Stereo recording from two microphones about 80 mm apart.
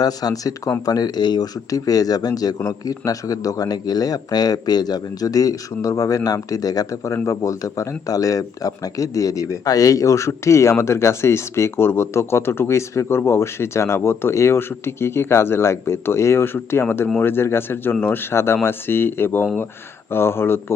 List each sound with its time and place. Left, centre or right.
0.0 s speech: left